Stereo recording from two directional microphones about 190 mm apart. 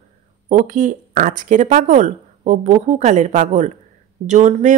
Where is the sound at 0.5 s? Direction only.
40° right (ahead or behind).